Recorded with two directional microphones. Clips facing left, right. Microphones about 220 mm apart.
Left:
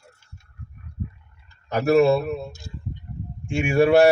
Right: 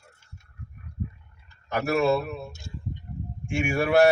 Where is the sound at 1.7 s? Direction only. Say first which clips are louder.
Left 6 dB; 20° left (ahead or behind).